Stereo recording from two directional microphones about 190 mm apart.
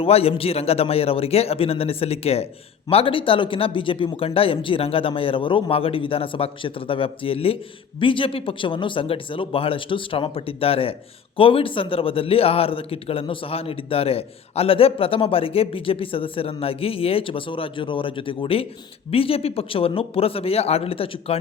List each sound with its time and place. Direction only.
0.0 s a man's voice: 30° left (ahead or behind)